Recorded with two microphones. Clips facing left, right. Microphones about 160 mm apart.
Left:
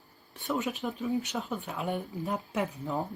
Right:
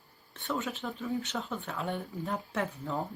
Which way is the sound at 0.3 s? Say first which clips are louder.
Left 3 dB; 15° left (ahead or behind).